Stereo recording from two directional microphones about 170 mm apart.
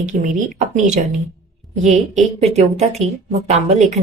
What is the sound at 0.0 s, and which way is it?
Speech, 45° right (ahead or behind).